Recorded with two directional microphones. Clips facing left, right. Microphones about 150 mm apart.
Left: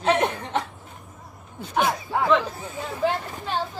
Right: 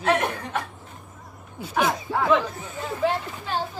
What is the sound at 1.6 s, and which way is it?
Speech, 5° right (ahead or behind).